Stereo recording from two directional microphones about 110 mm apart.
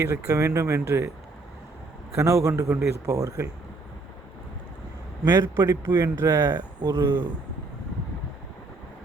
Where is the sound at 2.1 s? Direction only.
25° right (ahead or behind).